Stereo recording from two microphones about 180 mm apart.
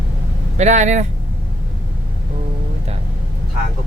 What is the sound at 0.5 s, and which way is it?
Speech, 40° right (ahead or behind).